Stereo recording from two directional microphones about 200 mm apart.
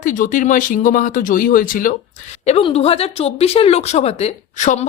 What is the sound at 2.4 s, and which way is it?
Speech, 30° left (ahead or behind).